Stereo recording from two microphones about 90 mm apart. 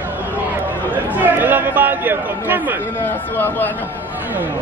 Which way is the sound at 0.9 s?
20° right (ahead or behind).